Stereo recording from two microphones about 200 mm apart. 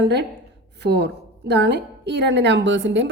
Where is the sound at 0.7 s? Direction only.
60° right (ahead or behind).